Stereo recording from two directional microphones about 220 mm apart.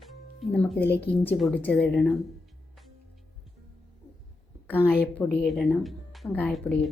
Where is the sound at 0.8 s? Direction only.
45° left (ahead or behind).